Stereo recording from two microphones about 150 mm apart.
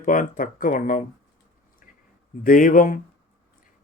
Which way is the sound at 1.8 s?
60° left (ahead or behind).